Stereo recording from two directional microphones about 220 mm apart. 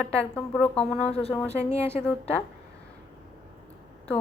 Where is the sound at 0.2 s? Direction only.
5° left (ahead or behind).